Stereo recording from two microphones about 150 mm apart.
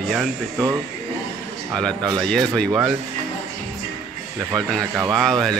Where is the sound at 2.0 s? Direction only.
30° right (ahead or behind).